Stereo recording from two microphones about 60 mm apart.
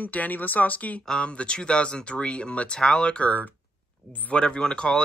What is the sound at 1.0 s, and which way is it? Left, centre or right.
Speech, centre.